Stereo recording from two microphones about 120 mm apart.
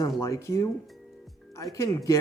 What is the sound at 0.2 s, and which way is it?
Speech, 25° left (ahead or behind).